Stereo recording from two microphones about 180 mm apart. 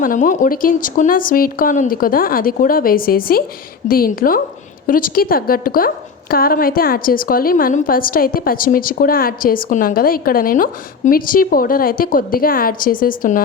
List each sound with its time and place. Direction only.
0.0 s a woman's voice: 45° left (ahead or behind)